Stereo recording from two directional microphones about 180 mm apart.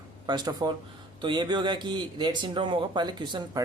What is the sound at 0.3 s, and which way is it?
Speech, 25° right (ahead or behind).